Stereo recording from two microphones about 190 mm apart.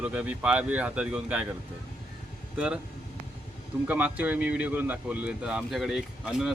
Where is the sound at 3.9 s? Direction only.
10° right (ahead or behind).